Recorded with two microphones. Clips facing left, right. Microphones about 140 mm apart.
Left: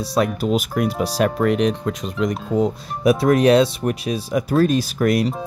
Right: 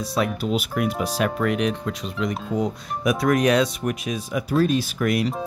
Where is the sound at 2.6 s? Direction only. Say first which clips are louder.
Left 7 dB; 30° left (ahead or behind).